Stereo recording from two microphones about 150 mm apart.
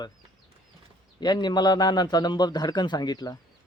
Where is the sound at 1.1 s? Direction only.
30° left (ahead or behind).